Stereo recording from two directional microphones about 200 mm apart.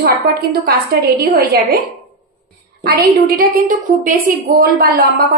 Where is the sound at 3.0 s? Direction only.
50° right (ahead or behind).